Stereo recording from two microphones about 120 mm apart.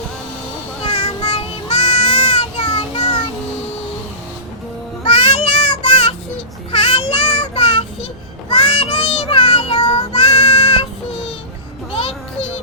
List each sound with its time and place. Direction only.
0.8 s child singing: 50° left (ahead or behind)
5.0 s child singing: 50° left (ahead or behind)
11.9 s music: 55° left (ahead or behind)